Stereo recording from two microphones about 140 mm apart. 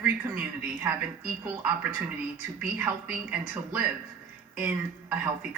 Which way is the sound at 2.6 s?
10° right (ahead or behind).